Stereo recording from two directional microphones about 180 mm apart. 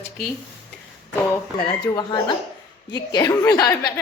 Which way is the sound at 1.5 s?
25° left (ahead or behind).